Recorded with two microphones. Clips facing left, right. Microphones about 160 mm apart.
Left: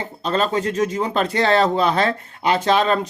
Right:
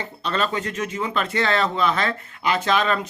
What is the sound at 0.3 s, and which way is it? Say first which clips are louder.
Speech: left 5 dB; 40° left (ahead or behind).